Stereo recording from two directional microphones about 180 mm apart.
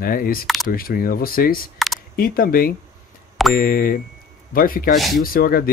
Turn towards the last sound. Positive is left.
turn(degrees=55)  # may be behind; listen again after turning